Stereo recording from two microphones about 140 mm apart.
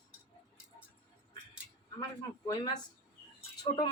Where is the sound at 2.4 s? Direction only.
30° left (ahead or behind).